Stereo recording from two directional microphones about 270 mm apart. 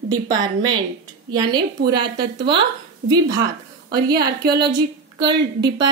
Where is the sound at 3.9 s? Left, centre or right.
Right.